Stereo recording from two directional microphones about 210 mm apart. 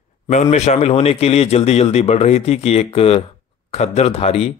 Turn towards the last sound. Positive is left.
turn(degrees=30)  # may be behind; listen again after turning